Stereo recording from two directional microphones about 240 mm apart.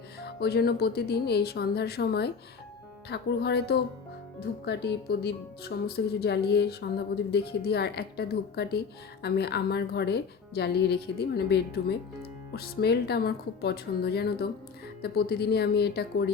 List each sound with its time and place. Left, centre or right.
0.2 s speech: left